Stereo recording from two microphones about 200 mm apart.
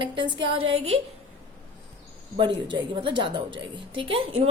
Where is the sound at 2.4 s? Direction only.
25° right (ahead or behind).